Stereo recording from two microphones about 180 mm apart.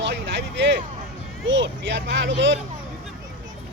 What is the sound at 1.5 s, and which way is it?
Speech, 85° right.